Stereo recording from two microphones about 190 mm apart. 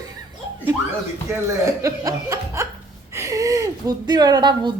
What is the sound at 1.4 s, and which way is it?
A woman's voice, 15° right (ahead or behind).